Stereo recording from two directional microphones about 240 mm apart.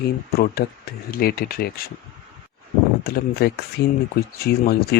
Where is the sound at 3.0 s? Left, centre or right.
Left.